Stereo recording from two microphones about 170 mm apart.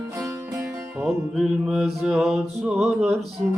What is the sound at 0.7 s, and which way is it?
Music, centre (ahead or behind).